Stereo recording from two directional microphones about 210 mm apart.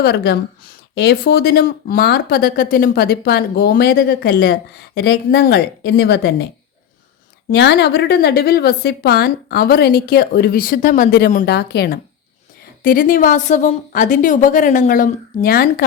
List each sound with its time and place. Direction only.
0.0 s a woman's voice: 50° left (ahead or behind)
7.5 s a woman's voice: 55° left (ahead or behind)